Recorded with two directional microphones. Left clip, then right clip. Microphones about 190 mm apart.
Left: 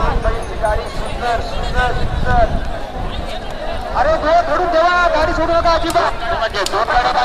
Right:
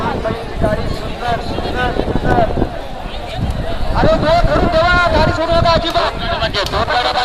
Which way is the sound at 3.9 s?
35° right (ahead or behind).